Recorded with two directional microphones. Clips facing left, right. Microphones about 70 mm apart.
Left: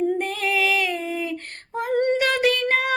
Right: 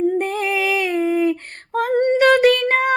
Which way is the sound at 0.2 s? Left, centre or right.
Right.